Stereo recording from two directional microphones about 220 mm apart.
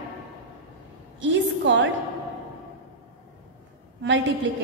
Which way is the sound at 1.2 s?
55° right (ahead or behind).